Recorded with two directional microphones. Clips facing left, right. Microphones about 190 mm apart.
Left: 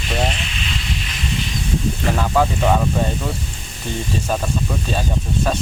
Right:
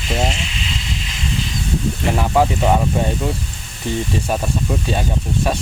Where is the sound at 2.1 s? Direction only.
20° right (ahead or behind).